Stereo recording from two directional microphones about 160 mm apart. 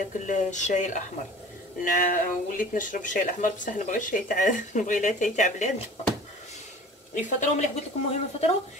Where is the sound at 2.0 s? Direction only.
55° left (ahead or behind).